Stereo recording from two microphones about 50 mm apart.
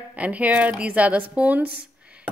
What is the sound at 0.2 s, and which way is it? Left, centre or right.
A woman's voice, right.